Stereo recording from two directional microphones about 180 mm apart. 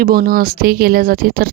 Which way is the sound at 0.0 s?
55° right (ahead or behind).